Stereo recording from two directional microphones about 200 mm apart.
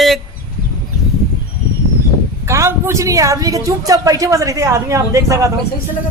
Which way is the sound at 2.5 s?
15° right (ahead or behind).